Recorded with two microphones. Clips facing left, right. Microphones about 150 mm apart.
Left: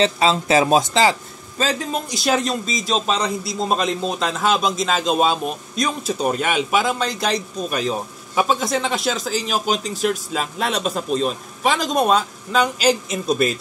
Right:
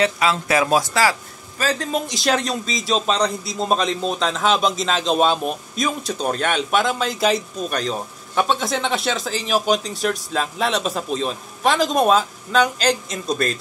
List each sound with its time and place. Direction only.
0.0 s speech: 25° left (ahead or behind)
1.9 s a man's voice: centre (ahead or behind)